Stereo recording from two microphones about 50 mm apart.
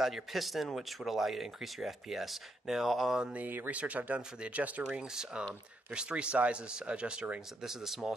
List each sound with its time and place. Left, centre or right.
0.0 s speech: centre
3.3 s speech: right
3.7 s speech: right
5.0 s speech: centre
7.6 s speech: centre